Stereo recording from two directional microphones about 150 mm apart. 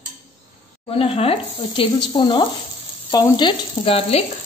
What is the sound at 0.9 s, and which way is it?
Speech, 40° left (ahead or behind).